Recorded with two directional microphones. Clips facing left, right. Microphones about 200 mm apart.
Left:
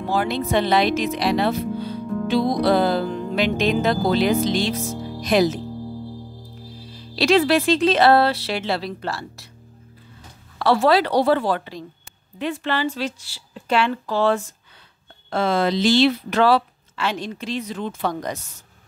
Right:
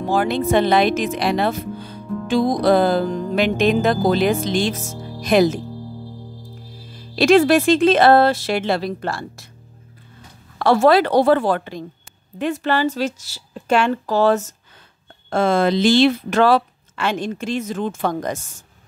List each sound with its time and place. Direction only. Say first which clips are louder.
0.1 s speech: right 4 dB; 50° right (ahead or behind)
7.2 s speech: right 4 dB; 50° right (ahead or behind)
10.6 s speech: right 3 dB; 50° right (ahead or behind)